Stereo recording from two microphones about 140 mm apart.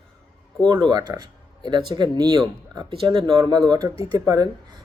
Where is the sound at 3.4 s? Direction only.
25° right (ahead or behind).